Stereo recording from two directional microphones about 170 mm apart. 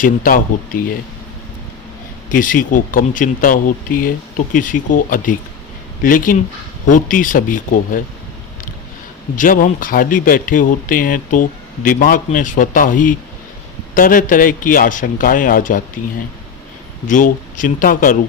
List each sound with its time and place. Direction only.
0.0 s speech: 55° left (ahead or behind)
2.3 s speech: 50° left (ahead or behind)
9.3 s speech: 50° left (ahead or behind)
17.1 s speech: 50° left (ahead or behind)